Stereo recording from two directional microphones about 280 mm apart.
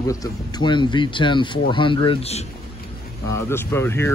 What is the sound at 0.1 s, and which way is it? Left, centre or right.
Speech, centre.